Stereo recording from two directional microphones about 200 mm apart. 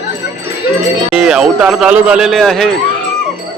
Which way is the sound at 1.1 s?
5° right (ahead or behind).